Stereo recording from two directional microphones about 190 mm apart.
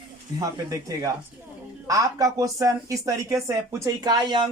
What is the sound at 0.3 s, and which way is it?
Speech, 20° right (ahead or behind).